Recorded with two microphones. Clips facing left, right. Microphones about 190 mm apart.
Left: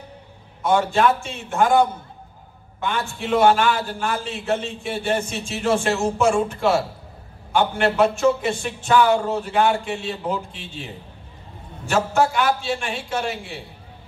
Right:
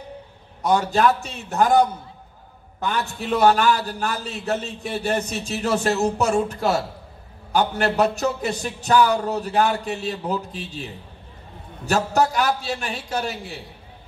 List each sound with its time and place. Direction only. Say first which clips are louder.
0.6 s a man's voice: left 1 dB; 40° right (ahead or behind)